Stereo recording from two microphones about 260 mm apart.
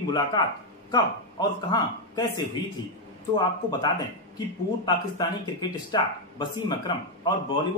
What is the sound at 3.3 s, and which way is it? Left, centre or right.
Speech, centre.